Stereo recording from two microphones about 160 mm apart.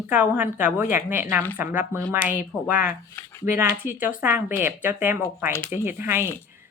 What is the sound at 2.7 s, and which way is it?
Speech, 55° left (ahead or behind).